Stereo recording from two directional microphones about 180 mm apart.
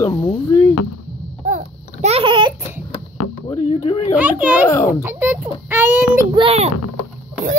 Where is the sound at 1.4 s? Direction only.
40° right (ahead or behind); by 2.5 s 25° right (ahead or behind).